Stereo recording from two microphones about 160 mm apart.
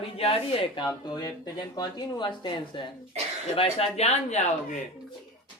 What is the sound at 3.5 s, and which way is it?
Speech, 40° left (ahead or behind).